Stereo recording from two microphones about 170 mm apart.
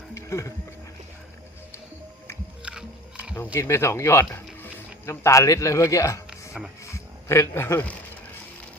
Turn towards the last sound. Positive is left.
turn(degrees=15)  # may be behind; listen again after turning